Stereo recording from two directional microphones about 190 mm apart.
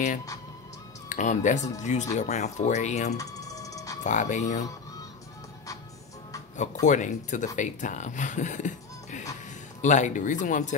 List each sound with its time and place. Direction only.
1.0 s speech: 40° left (ahead or behind)
3.2 s music: 20° left (ahead or behind)
4.0 s speech: 40° left (ahead or behind)
6.5 s speech: 40° left (ahead or behind)